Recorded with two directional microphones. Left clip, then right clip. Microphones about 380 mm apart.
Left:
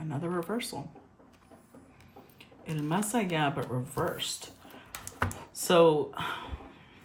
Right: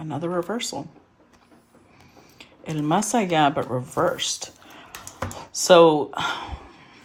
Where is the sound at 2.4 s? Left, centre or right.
Centre.